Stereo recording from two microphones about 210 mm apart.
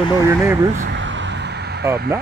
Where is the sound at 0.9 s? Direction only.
60° right (ahead or behind).